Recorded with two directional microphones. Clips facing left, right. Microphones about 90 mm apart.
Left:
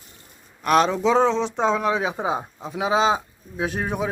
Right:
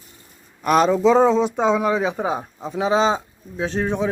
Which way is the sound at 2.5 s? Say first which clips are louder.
Right 4 dB; centre (ahead or behind).